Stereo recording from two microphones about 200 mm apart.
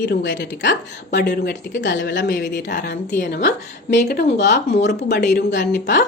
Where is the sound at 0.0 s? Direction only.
60° left (ahead or behind).